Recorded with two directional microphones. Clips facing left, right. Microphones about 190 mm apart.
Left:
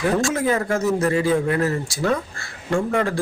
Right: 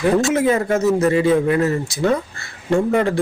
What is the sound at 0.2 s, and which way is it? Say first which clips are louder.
Speech: right 4 dB; 25° right (ahead or behind).